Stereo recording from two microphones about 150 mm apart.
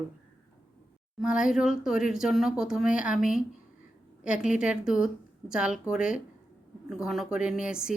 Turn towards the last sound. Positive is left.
turn(degrees=-5)  # may be behind; listen again after turning